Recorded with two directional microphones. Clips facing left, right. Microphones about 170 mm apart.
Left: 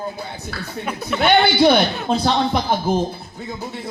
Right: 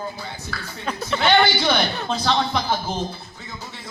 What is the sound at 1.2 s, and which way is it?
Speech, 60° left (ahead or behind).